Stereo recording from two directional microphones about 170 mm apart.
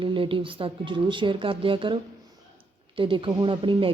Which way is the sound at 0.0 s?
30° right (ahead or behind).